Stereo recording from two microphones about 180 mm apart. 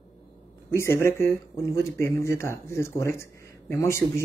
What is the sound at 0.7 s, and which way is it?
Speech, 15° left (ahead or behind).